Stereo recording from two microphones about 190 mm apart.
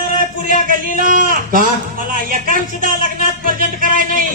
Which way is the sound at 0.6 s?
45° right (ahead or behind).